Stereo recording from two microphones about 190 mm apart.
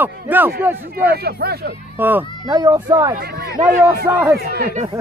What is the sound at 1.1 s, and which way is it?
Speech, 55° right (ahead or behind).